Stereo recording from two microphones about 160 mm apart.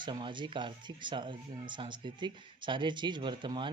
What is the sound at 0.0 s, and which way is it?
Speech, 30° right (ahead or behind).